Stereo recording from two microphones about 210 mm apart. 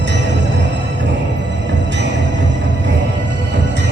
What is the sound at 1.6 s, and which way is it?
Music, 60° right (ahead or behind).